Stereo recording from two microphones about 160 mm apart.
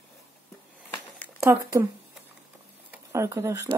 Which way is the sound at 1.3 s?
15° right (ahead or behind).